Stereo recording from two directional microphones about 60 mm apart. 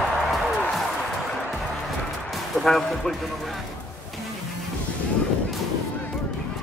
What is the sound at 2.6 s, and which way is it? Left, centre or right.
Speech, centre.